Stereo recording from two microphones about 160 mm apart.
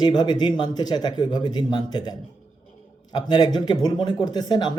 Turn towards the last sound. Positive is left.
turn(degrees=25)  # may be behind; listen again after turning